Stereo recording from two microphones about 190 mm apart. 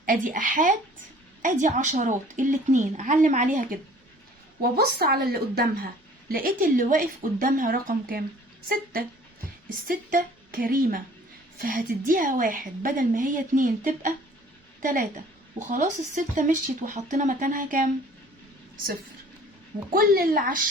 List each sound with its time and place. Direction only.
0.0 s a woman's voice: 45° right (ahead or behind)
4.8 s a woman's voice: 55° right (ahead or behind)
19.9 s a woman's voice: 50° right (ahead or behind)